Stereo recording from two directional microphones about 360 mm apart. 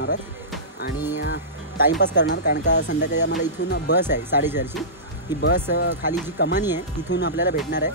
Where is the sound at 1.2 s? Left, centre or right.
Left.